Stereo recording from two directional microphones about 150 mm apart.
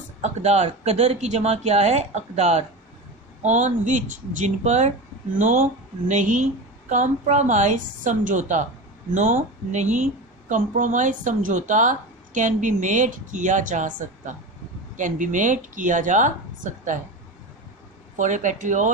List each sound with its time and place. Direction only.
0.2 s a woman's voice: 50° right (ahead or behind)
18.2 s a woman's voice: 55° right (ahead or behind)